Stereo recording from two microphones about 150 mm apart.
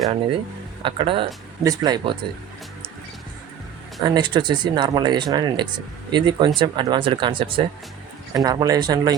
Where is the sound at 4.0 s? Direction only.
30° right (ahead or behind).